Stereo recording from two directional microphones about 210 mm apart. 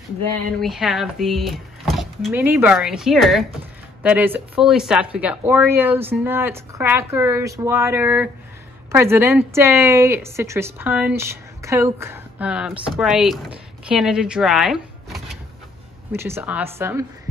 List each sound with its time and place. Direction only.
0.6 s speech: centre (ahead or behind)
2.3 s a woman's voice: 10° right (ahead or behind)
16.1 s a woman's voice: 10° right (ahead or behind)